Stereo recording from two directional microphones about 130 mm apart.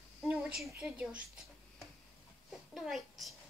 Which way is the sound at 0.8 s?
10° right (ahead or behind).